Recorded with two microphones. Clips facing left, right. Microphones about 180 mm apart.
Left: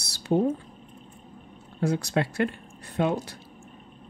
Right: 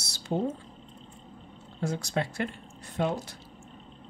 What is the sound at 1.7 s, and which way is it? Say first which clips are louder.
Speech: left 5 dB; 60° left (ahead or behind).